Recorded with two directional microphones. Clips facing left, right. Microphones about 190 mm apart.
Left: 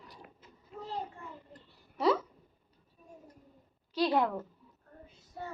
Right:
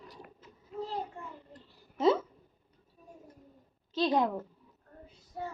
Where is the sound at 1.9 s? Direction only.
25° right (ahead or behind).